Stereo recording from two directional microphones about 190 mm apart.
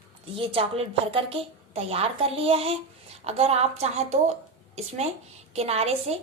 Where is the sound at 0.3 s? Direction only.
30° right (ahead or behind).